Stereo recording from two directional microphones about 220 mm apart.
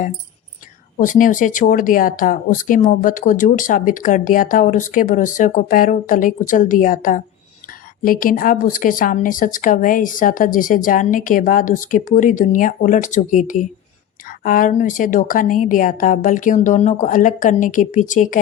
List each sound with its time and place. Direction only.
0.9 s speech: 35° left (ahead or behind)